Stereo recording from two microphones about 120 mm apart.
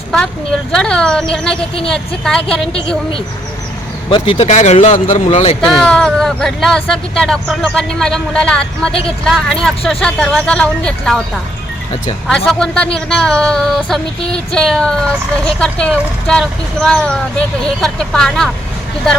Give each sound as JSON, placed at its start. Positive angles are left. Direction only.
{"t": 0.7, "sound": "speech", "side_deg": 5}
{"t": 4.1, "sound": "speech", "side_deg": 50}
{"t": 4.4, "sound": "speech", "side_deg": 70}
{"t": 5.5, "sound": "speech", "side_deg": 5}
{"t": 8.9, "sound": "speech", "side_deg": 50}
{"t": 9.2, "sound": "speech", "side_deg": 5}
{"t": 12.5, "sound": "speech", "side_deg": 5}